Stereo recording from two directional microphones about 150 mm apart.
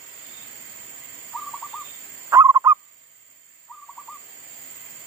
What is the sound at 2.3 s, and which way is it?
Goose, 25° right (ahead or behind).